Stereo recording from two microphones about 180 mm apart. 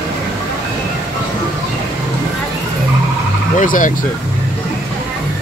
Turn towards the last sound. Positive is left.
turn(degrees=45)  # may be behind; listen again after turning